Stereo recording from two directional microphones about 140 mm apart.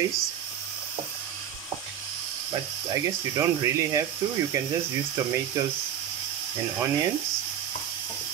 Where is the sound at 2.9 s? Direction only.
20° right (ahead or behind).